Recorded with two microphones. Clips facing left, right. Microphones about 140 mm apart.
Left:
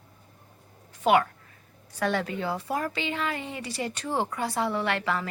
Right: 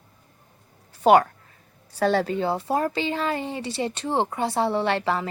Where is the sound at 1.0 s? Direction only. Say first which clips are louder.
Right 5 dB; 40° right (ahead or behind).